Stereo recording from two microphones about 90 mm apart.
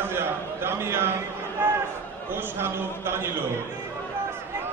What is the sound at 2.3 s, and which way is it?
A man's voice, 25° right (ahead or behind).